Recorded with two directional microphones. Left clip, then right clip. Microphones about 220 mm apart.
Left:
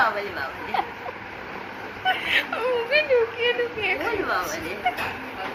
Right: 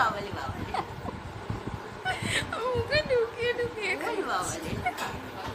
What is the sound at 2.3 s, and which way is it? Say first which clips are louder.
A woman's voice: left 6 dB; 25° right (ahead or behind).